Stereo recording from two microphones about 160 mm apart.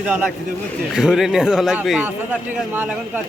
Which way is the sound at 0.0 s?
5° right (ahead or behind).